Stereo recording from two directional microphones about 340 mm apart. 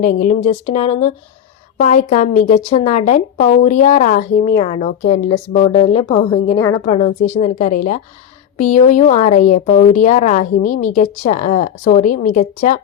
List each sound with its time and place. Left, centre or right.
0.0 s a woman's voice: left